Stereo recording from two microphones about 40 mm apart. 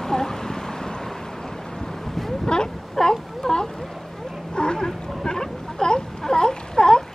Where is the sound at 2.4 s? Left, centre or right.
Centre.